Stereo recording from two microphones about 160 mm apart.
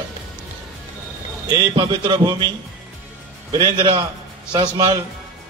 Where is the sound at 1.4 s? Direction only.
30° right (ahead or behind).